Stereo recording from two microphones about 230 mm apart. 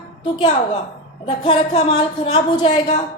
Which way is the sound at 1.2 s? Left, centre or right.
Left.